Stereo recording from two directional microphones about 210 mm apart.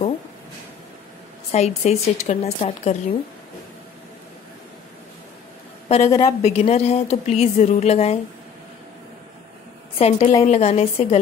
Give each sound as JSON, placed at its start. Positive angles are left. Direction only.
{"t": 1.5, "sound": "speech", "side_deg": 30}
{"t": 6.0, "sound": "a woman's voice", "side_deg": 15}
{"t": 6.4, "sound": "speech", "side_deg": 30}
{"t": 9.9, "sound": "speech", "side_deg": 30}